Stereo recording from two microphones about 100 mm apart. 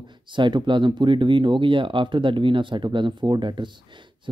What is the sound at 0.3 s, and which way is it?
Speech, 50° right (ahead or behind).